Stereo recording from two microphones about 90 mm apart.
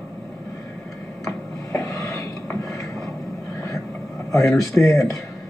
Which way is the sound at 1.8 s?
35° left (ahead or behind).